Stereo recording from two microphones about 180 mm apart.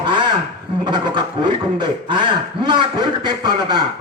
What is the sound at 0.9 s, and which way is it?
Speech, 25° right (ahead or behind).